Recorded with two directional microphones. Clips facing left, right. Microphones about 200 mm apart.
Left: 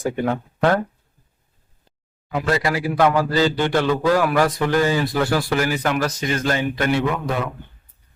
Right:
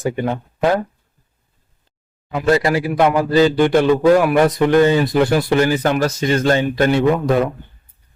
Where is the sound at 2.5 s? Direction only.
30° right (ahead or behind).